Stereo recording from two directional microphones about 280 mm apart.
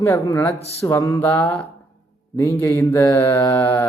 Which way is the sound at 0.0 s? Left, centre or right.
Centre.